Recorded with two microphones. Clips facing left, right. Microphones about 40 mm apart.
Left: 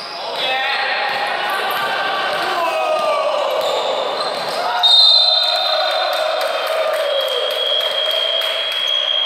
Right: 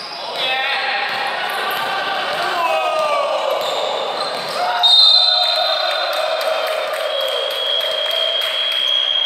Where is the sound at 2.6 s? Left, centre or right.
Right.